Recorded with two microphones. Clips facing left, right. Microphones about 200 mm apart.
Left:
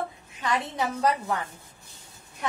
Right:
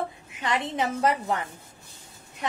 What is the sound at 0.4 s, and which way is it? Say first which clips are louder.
A woman's voice: right 1 dB; 25° right (ahead or behind).